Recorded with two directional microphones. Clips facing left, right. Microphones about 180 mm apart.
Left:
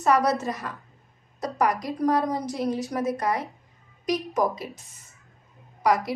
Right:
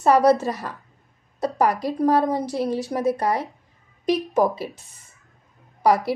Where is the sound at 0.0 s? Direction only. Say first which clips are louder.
Right 5 dB; 30° right (ahead or behind).